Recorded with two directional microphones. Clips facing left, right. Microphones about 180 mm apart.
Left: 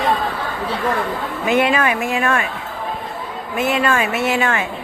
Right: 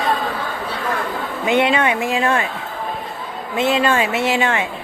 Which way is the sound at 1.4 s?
25° right (ahead or behind).